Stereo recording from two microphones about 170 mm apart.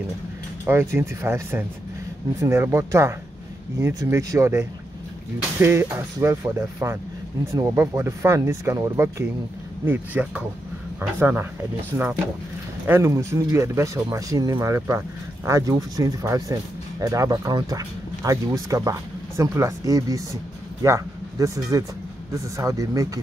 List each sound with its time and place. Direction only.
0.7 s speech: 15° right (ahead or behind)
12.8 s speech: 15° right (ahead or behind)